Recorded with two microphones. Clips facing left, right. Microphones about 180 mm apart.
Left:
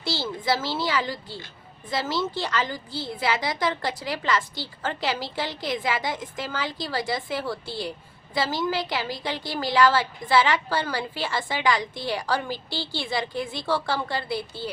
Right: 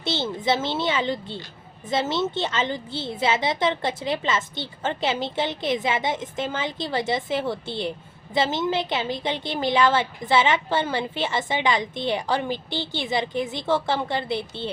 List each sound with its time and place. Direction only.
0.0 s a woman's voice: 25° right (ahead or behind)